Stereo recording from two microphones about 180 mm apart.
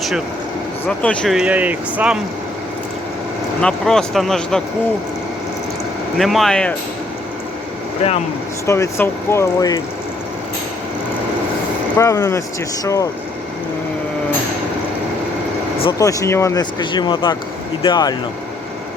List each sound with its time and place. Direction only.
0.9 s speech: 5° left (ahead or behind)
3.6 s speech: 5° left (ahead or behind)
6.1 s speech: centre (ahead or behind)
8.6 s speech: 15° left (ahead or behind)
11.9 s speech: 15° left (ahead or behind)
15.8 s speech: 25° left (ahead or behind)